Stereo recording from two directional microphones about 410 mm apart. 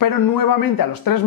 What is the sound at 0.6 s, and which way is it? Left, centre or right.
Speech, left.